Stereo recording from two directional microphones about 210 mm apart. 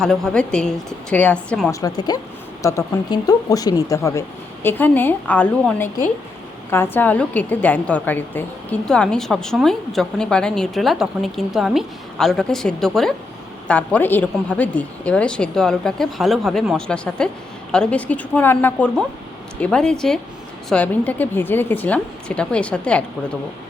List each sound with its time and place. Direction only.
0.0 s a woman's voice: centre (ahead or behind)
1.7 s a woman's voice: 20° left (ahead or behind)